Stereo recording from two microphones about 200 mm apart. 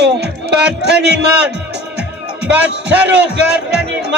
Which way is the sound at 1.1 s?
5° right (ahead or behind).